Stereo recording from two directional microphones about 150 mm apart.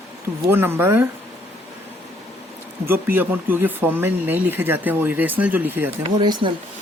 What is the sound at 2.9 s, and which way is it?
Speech, 15° right (ahead or behind).